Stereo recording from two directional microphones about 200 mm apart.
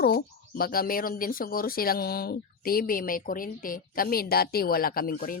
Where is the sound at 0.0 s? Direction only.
50° left (ahead or behind).